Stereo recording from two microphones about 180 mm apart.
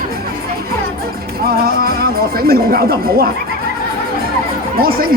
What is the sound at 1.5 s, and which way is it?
Speech, 60° right (ahead or behind).